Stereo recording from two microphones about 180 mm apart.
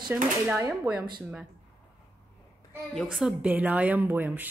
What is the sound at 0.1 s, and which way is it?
Speech, 10° right (ahead or behind).